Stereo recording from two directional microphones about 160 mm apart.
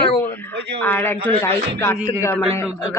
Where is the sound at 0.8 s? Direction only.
10° left (ahead or behind).